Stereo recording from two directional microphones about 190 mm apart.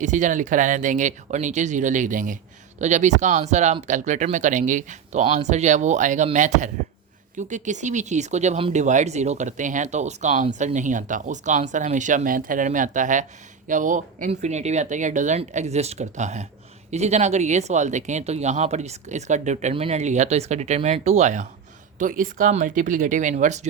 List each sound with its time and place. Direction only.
0.0 s speech: 40° right (ahead or behind)